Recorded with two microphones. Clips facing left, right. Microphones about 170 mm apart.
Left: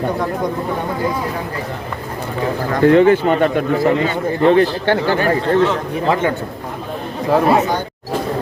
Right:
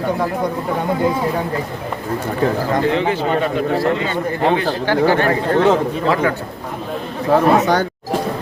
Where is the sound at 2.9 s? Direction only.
50° left (ahead or behind).